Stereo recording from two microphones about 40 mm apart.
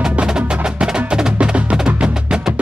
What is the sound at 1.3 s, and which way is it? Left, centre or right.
Music, right.